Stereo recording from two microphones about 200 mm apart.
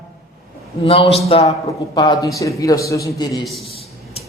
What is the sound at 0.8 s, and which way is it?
A man's voice, 25° left (ahead or behind).